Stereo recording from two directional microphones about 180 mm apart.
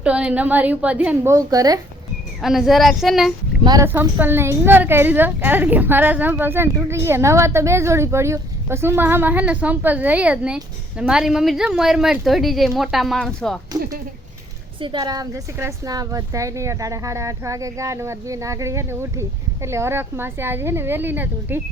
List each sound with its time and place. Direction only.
0.0 s a woman's voice: 5° right (ahead or behind)
2.4 s child singing: centre (ahead or behind)
3.6 s speech: 25° right (ahead or behind)
3.8 s a woman's voice: 10° right (ahead or behind)
14.8 s a woman's voice: 25° right (ahead or behind)